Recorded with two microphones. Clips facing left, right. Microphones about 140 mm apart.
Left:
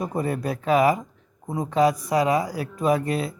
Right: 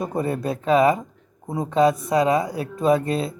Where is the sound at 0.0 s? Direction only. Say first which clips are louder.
Right 2 dB; 25° right (ahead or behind).